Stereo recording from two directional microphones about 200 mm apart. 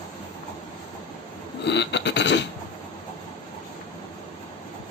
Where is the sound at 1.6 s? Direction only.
60° left (ahead or behind).